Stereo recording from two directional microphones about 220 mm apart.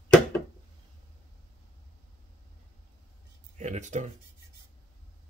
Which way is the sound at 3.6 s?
35° right (ahead or behind).